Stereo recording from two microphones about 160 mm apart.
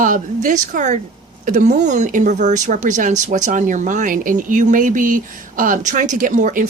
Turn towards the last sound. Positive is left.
turn(degrees=-55)  # may be behind; listen again after turning